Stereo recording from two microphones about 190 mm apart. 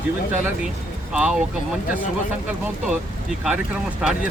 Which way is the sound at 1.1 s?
5° right (ahead or behind).